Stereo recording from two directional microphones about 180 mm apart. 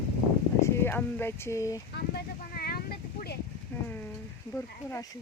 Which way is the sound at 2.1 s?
60° left (ahead or behind).